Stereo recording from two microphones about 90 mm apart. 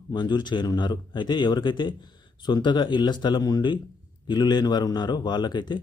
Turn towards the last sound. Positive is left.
turn(degrees=60)  # may be behind; listen again after turning